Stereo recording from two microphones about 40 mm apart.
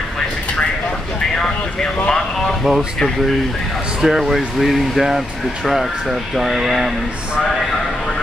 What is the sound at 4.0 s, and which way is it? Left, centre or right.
Speech, centre.